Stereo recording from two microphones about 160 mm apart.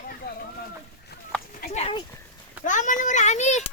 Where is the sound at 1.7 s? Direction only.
40° left (ahead or behind).